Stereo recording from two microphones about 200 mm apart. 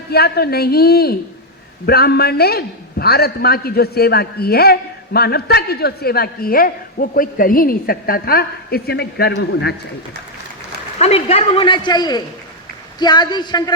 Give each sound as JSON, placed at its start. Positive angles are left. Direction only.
{"t": 0.1, "sound": "a man's voice", "side_deg": 55}
{"t": 10.9, "sound": "a man's voice", "side_deg": 30}